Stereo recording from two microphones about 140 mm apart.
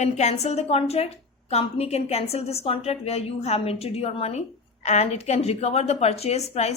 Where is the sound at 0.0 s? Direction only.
55° left (ahead or behind).